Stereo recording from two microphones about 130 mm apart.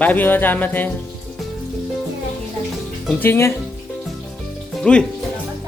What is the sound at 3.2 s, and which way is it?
Speech, 20° left (ahead or behind).